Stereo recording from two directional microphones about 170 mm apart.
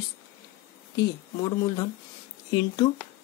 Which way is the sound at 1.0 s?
20° left (ahead or behind).